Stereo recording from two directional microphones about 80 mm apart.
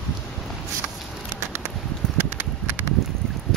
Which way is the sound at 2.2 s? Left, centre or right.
Right.